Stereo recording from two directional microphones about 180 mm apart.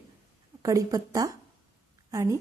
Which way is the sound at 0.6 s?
20° right (ahead or behind).